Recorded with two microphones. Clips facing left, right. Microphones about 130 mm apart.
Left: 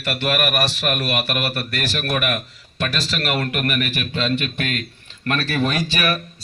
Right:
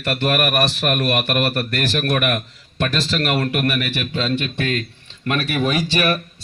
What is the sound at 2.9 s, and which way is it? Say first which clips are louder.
Speech: right 3 dB; 35° right (ahead or behind).